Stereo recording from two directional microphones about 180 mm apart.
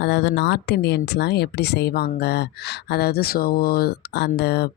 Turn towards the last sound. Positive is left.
turn(degrees=65)  # may be behind; listen again after turning